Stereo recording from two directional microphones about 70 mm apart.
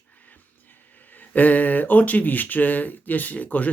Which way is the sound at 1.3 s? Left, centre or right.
Left.